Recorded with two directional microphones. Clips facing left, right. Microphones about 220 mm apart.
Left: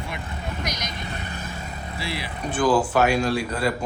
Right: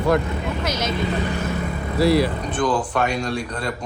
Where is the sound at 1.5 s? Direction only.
90° right.